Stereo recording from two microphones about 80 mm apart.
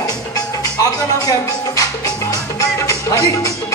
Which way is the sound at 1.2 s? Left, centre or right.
Left.